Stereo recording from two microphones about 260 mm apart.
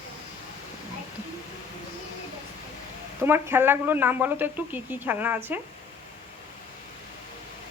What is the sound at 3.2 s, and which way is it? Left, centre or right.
Speech, centre.